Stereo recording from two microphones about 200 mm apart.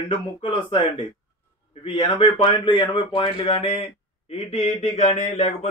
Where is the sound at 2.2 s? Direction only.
25° left (ahead or behind).